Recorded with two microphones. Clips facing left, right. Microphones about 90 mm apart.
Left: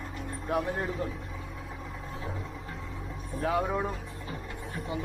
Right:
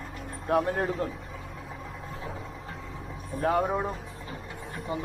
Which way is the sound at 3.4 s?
40° right (ahead or behind).